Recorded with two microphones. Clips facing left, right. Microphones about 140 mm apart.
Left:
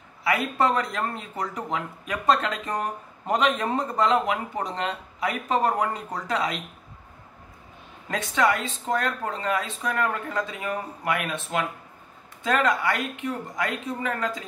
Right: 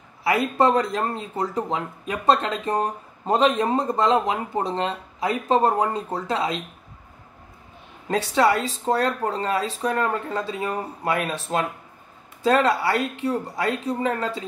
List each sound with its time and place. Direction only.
0.2 s speech: 30° right (ahead or behind)
8.1 s speech: 35° right (ahead or behind)